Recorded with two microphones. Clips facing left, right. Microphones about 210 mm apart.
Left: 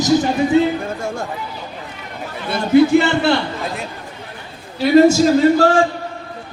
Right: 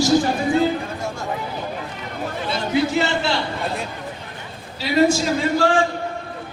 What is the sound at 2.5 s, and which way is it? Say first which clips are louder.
Speech: left 10 dB; 55° left (ahead or behind).